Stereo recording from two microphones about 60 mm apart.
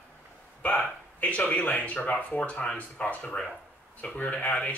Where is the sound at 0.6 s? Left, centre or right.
Left.